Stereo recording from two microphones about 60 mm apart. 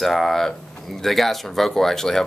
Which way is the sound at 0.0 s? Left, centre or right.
Centre.